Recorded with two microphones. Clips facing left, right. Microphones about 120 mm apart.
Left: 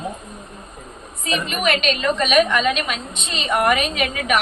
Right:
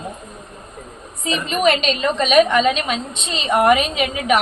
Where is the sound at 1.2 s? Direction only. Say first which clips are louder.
Right 4 dB; 30° right (ahead or behind).